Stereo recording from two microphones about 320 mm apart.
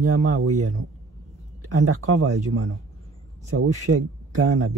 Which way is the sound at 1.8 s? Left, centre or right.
Right.